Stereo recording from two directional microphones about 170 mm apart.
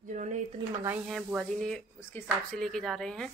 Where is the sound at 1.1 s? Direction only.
5° left (ahead or behind).